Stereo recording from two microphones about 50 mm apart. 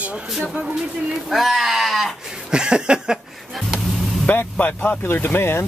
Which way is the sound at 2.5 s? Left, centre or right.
Centre.